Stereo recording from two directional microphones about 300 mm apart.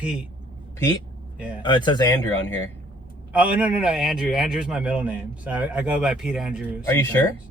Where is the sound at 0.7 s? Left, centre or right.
Centre.